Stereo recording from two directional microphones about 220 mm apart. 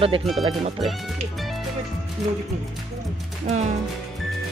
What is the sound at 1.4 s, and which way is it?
Music, centre (ahead or behind).